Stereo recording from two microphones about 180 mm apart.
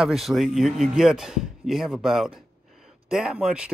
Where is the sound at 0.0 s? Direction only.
Centre (ahead or behind).